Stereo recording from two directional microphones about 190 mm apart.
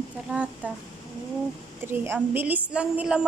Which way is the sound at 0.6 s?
10° right (ahead or behind).